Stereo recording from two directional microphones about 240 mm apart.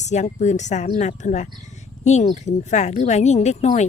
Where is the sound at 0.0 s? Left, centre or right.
Left.